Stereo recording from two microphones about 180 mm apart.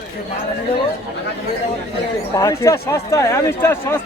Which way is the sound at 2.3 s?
15° left (ahead or behind).